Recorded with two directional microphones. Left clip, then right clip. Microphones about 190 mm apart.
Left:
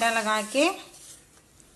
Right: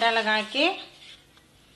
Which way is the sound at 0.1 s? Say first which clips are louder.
Right 1 dB; 50° left (ahead or behind).